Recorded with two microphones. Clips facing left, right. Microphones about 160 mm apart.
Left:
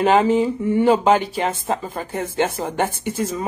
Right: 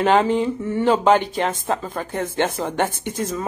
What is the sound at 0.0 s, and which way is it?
Speech, 10° left (ahead or behind).